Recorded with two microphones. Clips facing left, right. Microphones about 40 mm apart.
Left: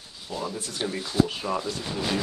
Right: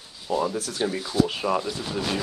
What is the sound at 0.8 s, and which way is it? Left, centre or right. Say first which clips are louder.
Speech: right 1 dB; right.